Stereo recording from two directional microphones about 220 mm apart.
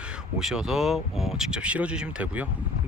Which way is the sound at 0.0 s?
5° right (ahead or behind).